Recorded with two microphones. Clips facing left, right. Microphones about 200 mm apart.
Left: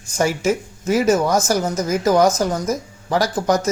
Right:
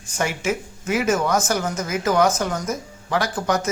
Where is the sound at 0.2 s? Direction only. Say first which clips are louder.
Left 5 dB; 40° left (ahead or behind).